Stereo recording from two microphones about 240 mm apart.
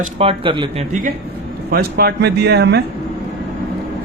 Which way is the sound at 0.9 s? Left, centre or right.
Right.